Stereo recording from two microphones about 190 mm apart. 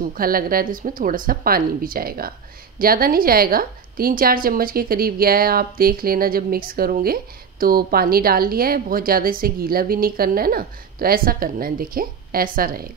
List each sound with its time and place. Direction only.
0.0 s a woman's voice: 50° right (ahead or behind)